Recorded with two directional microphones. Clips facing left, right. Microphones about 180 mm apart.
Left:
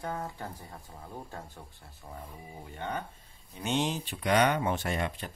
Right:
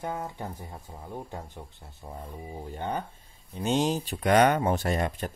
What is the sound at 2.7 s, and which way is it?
Speech, 35° right (ahead or behind).